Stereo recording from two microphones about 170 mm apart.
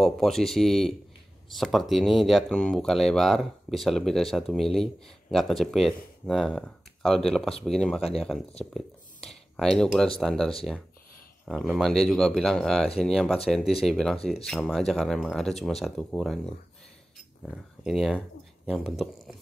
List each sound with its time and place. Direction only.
0.0 s speech: centre (ahead or behind)
8.0 s speech: 35° left (ahead or behind)
8.7 s a sound: centre (ahead or behind)
10.1 s speech: 5° left (ahead or behind)
17.8 s speech: centre (ahead or behind)